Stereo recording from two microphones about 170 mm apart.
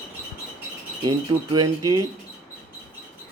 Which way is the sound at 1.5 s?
20° right (ahead or behind).